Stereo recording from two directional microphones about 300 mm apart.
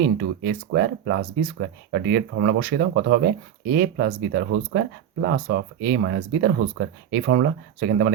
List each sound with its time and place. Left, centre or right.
0.0 s speech: right